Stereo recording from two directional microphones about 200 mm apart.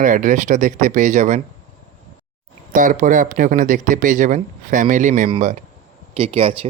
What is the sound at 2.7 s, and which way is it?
Speech, 40° right (ahead or behind).